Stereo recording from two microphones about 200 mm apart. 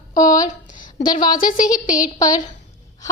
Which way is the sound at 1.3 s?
45° left (ahead or behind).